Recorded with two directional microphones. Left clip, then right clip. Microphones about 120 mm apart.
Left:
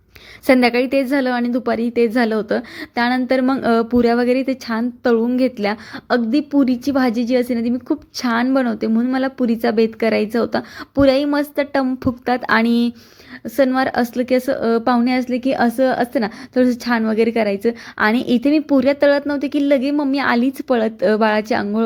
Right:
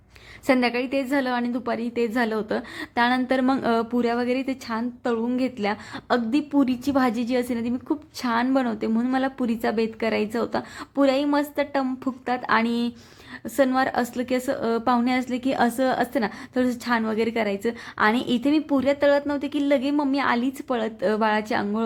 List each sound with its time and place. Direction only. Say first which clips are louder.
0.4 s a woman's voice: left 8 dB; 40° left (ahead or behind)